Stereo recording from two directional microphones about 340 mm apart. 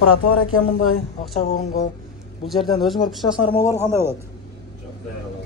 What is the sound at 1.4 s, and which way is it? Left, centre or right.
Speech, left.